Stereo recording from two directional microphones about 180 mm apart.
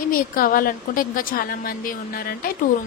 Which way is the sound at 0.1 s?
50° left (ahead or behind).